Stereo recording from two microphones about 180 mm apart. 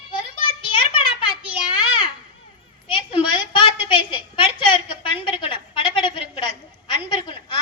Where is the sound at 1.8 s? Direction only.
25° left (ahead or behind).